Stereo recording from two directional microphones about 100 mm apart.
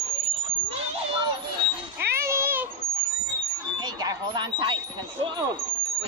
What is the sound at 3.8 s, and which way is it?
Speech, 40° right (ahead or behind).